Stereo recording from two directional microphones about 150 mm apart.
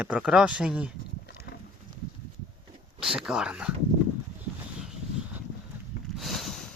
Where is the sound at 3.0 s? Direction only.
5° right (ahead or behind).